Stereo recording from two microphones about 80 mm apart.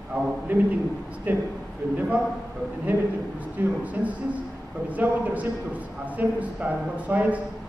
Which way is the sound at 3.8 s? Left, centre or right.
Centre.